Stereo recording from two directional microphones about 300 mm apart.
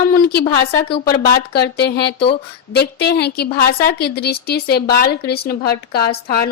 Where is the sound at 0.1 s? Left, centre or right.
Left.